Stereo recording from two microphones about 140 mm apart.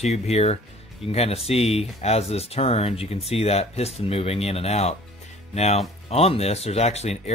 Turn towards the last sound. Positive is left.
turn(degrees=50)  # may be behind; listen again after turning